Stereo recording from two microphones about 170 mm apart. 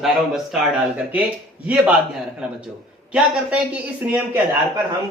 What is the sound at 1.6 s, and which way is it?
Speech, 5° right (ahead or behind).